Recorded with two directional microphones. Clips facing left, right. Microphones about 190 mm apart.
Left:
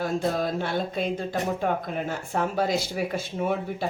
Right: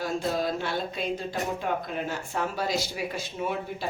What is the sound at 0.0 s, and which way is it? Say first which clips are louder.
Speech: left 2 dB; 55° left (ahead or behind).